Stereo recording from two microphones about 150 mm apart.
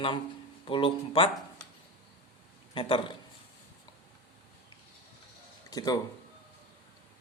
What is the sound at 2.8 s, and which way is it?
Speech, 35° left (ahead or behind).